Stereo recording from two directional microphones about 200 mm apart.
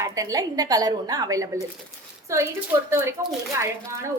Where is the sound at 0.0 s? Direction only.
15° right (ahead or behind).